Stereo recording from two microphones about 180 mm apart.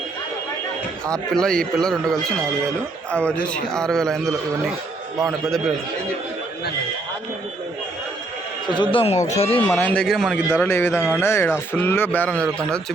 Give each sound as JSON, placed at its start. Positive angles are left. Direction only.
{"t": 1.0, "sound": "a man's voice", "side_deg": 5}
{"t": 8.7, "sound": "speech", "side_deg": 25}
{"t": 9.6, "sound": "speech", "side_deg": 10}